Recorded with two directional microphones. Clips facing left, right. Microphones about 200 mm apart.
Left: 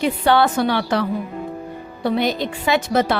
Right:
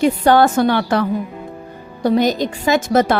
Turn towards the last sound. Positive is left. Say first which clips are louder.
# right 3 dB
turn(degrees=-50)  # may be behind; listen again after turning